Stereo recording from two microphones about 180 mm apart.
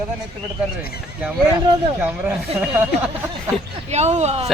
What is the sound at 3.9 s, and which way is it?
Speech, 40° right (ahead or behind).